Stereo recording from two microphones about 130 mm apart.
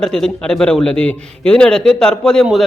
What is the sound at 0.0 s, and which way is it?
Speech, 5° left (ahead or behind).